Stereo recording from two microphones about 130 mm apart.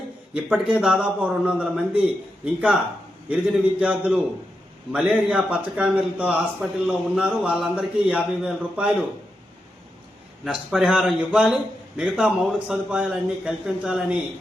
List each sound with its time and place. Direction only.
0.3 s a man's voice: 10° right (ahead or behind)
10.4 s a man's voice: 5° right (ahead or behind)